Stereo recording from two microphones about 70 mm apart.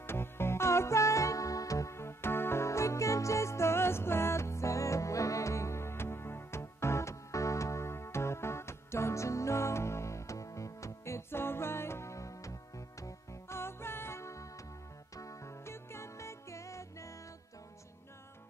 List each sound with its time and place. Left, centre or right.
0.0 s music: left